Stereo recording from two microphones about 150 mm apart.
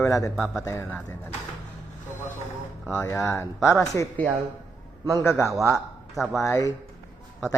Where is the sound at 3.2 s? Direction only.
20° left (ahead or behind).